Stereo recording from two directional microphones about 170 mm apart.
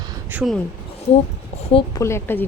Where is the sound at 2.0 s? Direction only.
15° left (ahead or behind).